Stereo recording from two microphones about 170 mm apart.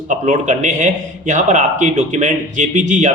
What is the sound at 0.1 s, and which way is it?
A man's voice, 45° right (ahead or behind).